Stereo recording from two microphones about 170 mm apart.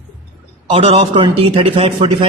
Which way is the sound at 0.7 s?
35° right (ahead or behind).